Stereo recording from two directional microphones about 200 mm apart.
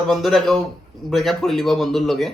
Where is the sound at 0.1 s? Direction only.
Centre (ahead or behind).